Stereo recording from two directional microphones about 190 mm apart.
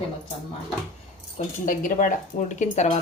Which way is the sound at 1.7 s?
45° left (ahead or behind).